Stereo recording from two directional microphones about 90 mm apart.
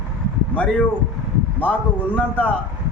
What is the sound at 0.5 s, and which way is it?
Speech, 15° left (ahead or behind).